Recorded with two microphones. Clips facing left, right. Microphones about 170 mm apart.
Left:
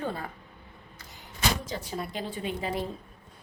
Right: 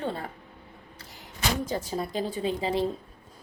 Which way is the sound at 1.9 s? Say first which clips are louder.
Right 4 dB; 35° right (ahead or behind).